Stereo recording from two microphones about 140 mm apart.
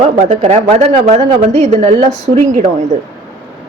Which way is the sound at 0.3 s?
50° right (ahead or behind).